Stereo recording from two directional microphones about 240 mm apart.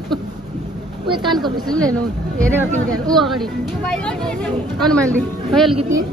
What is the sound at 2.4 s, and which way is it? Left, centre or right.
A woman's voice, centre.